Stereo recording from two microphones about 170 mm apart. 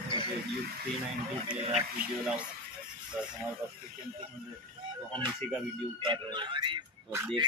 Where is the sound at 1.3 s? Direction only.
35° right (ahead or behind).